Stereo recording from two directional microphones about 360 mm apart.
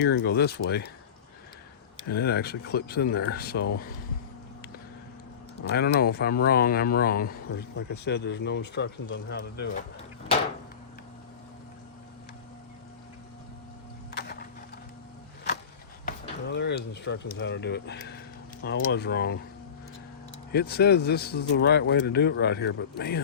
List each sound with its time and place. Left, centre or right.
0.0 s speech: left
2.0 s speech: left
5.6 s speech: left
14.1 s a sound: left
16.0 s speech: left
20.5 s speech: left